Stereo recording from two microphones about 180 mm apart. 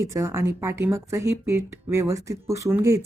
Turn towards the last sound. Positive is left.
turn(degrees=-15)  # may be behind; listen again after turning